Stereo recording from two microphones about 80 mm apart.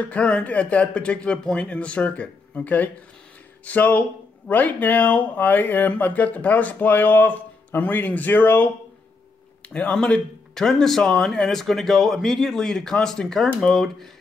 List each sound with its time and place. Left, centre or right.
0.0 s speech: centre
9.7 s speech: centre